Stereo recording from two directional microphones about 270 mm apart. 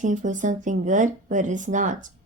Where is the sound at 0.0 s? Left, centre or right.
Right.